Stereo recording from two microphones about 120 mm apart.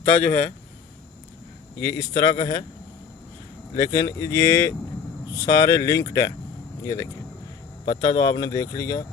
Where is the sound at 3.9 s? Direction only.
45° left (ahead or behind).